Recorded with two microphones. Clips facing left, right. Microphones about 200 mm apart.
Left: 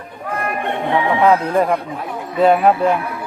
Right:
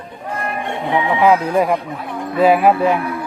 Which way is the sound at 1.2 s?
5° right (ahead or behind).